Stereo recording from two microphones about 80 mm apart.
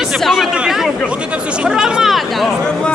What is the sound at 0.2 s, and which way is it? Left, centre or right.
Speech, centre.